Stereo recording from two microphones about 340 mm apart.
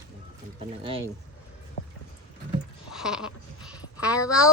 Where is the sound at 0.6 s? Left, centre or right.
Centre.